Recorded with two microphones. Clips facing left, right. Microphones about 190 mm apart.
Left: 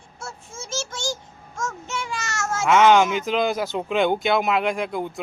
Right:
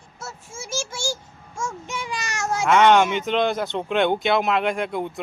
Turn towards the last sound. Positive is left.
turn(degrees=0)  # may be behind; listen again after turning